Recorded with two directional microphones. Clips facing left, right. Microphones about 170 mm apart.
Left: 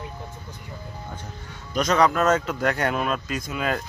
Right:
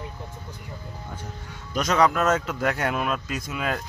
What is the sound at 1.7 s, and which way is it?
A man's voice, 5° right (ahead or behind).